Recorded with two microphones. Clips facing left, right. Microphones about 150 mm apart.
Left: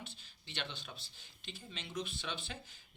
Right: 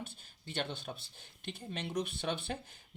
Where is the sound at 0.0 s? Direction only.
50° right (ahead or behind).